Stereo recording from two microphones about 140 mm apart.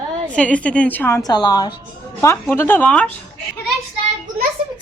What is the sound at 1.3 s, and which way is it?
Speech, 30° left (ahead or behind).